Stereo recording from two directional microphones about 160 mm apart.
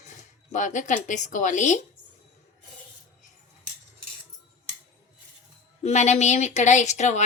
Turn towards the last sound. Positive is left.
turn(degrees=45)  # may be behind; listen again after turning